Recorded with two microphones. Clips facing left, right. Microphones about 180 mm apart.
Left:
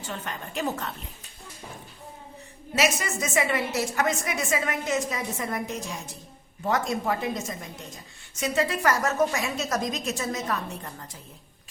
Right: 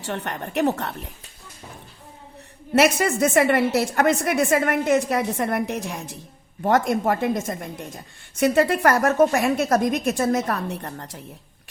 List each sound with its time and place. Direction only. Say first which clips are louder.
0.0 s a woman's voice: right 6 dB; 70° right (ahead or behind)
2.7 s a woman's voice: right 8 dB; 60° right (ahead or behind)
6.6 s a woman's voice: right 7 dB; 50° right (ahead or behind); by 11.2 s 65° right (ahead or behind)